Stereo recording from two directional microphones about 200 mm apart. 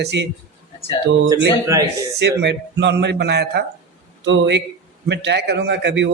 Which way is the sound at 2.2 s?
55° right (ahead or behind).